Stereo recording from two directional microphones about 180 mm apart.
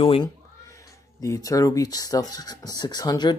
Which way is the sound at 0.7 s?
15° left (ahead or behind).